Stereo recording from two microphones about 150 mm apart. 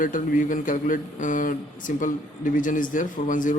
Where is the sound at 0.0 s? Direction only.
60° left (ahead or behind).